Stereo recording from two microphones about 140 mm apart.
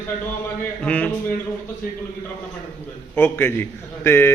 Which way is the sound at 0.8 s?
10° left (ahead or behind).